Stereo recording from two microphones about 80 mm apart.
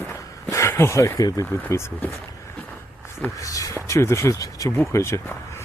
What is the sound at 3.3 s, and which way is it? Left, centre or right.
Speech, left.